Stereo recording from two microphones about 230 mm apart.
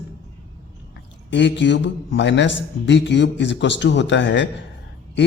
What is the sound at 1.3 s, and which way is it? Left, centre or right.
A man's voice, left.